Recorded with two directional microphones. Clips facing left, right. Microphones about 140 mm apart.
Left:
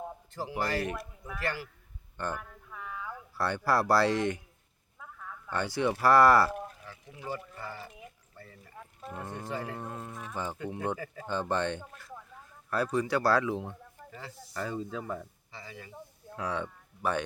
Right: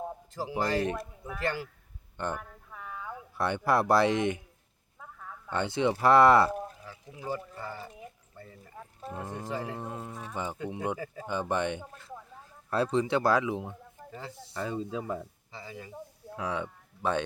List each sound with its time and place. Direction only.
0.3 s a man's voice: 15° right (ahead or behind)
2.6 s a sound: 30° right (ahead or behind)
3.1 s speech: 20° right (ahead or behind)
4.9 s a sound: 20° right (ahead or behind)
7.3 s speech: 20° right (ahead or behind)
7.9 s a sound: 35° right (ahead or behind)
8.4 s speech: 20° right (ahead or behind)
14.1 s speech: 25° right (ahead or behind)
15.5 s speech: 25° right (ahead or behind)